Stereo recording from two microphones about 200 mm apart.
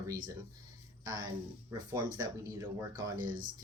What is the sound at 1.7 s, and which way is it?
Speech, 20° right (ahead or behind).